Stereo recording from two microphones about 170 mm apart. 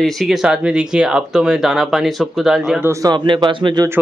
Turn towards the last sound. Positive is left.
turn(degrees=-25)  # may be behind; listen again after turning